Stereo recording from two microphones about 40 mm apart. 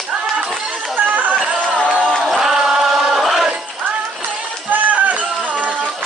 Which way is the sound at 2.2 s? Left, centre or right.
Centre.